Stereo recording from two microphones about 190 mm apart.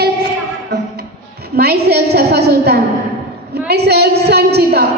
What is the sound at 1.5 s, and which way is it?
A woman's voice, 55° right (ahead or behind).